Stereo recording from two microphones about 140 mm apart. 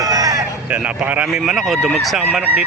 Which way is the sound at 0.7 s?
10° right (ahead or behind).